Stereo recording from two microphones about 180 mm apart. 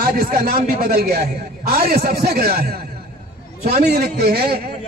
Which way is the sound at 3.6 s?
60° right (ahead or behind).